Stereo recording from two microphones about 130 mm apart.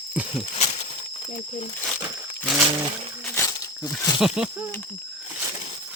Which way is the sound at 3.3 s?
25° left (ahead or behind).